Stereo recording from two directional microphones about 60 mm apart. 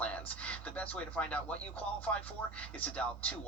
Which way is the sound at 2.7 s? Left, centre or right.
Left.